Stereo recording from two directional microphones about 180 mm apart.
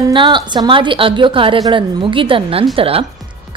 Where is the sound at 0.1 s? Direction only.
25° right (ahead or behind).